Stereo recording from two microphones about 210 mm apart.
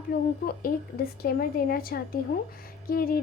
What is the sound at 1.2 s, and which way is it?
A woman's voice, 45° left (ahead or behind).